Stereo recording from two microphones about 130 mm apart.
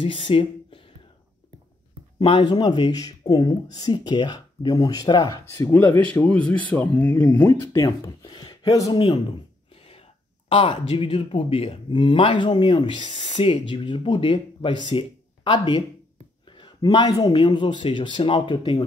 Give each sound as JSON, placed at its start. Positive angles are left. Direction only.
{"t": 0.0, "sound": "speech", "side_deg": 40}
{"t": 2.1, "sound": "speech", "side_deg": 40}
{"t": 5.5, "sound": "speech", "side_deg": 15}
{"t": 9.8, "sound": "a sound", "side_deg": 50}
{"t": 10.5, "sound": "speech", "side_deg": 40}